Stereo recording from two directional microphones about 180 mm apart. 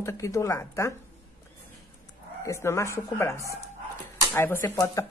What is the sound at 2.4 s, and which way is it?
Speech, 15° left (ahead or behind).